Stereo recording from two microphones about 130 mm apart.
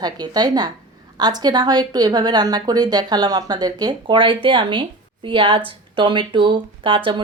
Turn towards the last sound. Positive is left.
turn(degrees=-40)  # may be behind; listen again after turning